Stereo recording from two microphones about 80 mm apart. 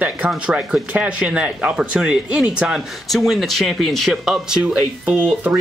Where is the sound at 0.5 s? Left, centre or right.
Centre.